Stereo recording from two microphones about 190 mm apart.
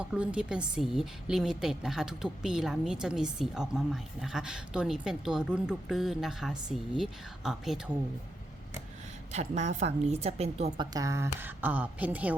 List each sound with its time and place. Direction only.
0.0 s a woman's voice: 5° right (ahead or behind)
9.3 s a woman's voice: 35° right (ahead or behind)
10.9 s a woman's voice: 15° right (ahead or behind)